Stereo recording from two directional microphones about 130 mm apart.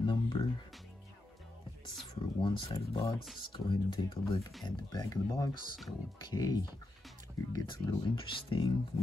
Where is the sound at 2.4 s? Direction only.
30° left (ahead or behind).